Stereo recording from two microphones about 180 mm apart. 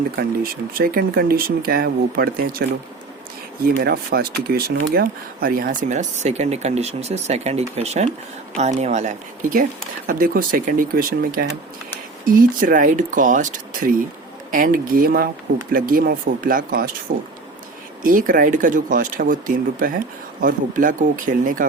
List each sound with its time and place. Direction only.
0.2 s speech: 55° right (ahead or behind)
3.8 s speech: 60° right (ahead or behind)
18.0 s speech: 50° right (ahead or behind)